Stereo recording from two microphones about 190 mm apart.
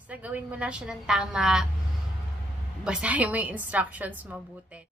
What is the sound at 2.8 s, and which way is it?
A woman's voice, 5° right (ahead or behind).